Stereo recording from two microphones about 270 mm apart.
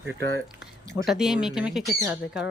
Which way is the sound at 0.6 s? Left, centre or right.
Centre.